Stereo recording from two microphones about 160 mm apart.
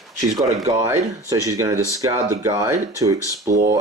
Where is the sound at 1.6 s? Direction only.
20° right (ahead or behind).